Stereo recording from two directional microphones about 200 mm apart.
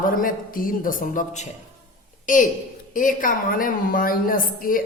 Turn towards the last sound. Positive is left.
turn(degrees=45)  # may be behind; listen again after turning